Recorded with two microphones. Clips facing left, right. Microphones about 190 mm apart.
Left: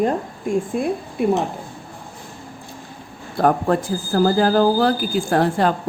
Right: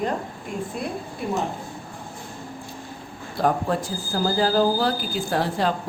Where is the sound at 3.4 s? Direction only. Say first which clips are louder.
Left 5 dB; 55° left (ahead or behind).